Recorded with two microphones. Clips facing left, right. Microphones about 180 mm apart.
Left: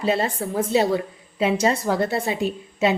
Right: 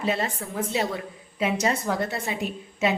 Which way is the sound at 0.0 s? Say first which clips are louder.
Left 5 dB; 30° left (ahead or behind).